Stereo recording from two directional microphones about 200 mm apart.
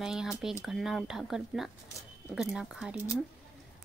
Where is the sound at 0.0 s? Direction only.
Centre (ahead or behind).